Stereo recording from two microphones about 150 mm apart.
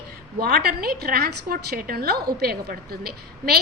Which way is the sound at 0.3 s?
85° right.